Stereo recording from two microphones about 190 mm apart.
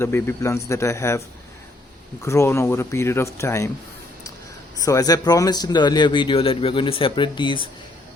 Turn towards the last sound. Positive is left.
turn(degrees=25)  # may be behind; listen again after turning